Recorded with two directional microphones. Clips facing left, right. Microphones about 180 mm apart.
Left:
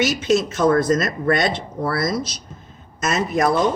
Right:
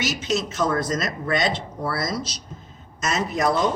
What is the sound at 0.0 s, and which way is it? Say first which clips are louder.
Speech: left 7 dB; 55° left (ahead or behind).